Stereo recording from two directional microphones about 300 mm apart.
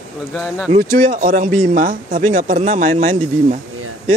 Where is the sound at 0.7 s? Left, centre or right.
Right.